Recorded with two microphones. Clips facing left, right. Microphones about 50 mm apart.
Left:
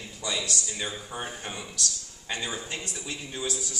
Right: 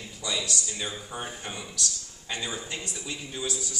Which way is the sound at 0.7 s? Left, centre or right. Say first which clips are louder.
Left 1 dB; left.